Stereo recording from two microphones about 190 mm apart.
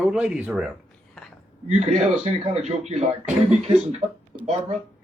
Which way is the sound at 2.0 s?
35° right (ahead or behind).